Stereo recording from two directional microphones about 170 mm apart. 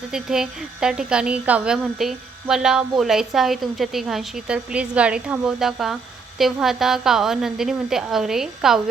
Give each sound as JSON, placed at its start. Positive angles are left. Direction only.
{"t": 0.1, "sound": "speech", "side_deg": -5}